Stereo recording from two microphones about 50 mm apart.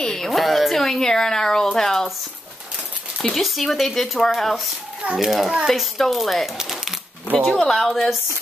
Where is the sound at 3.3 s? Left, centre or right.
Centre.